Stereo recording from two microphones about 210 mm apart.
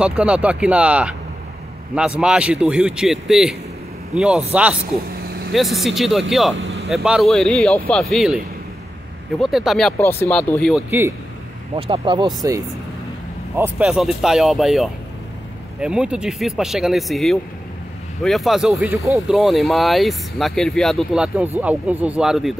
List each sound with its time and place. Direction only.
0.0 s speech: 5° right (ahead or behind)
5.5 s speech: centre (ahead or behind)
9.4 s speech: centre (ahead or behind)
10.9 s speech: 10° right (ahead or behind)
11.7 s speech: 25° right (ahead or behind)
13.6 s speech: 5° right (ahead or behind)